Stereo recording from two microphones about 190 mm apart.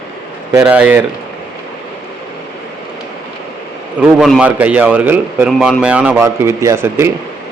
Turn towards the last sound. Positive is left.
turn(degrees=-15)  # may be behind; listen again after turning